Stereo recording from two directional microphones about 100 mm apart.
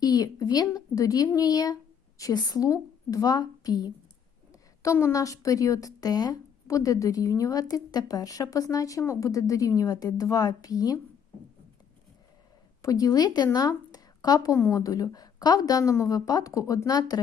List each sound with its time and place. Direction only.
0.0 s a woman's voice: 40° left (ahead or behind)
4.8 s speech: 30° left (ahead or behind)
12.8 s speech: 35° left (ahead or behind)